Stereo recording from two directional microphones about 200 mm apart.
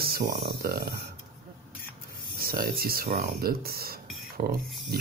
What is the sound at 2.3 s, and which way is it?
Speech, 45° right (ahead or behind).